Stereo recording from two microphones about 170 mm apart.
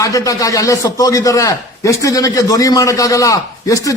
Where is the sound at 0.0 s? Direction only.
20° left (ahead or behind).